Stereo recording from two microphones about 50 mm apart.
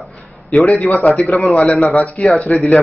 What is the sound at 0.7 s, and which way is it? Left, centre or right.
Speech, left.